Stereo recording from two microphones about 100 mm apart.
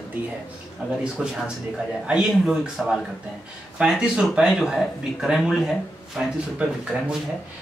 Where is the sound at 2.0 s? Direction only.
10° right (ahead or behind).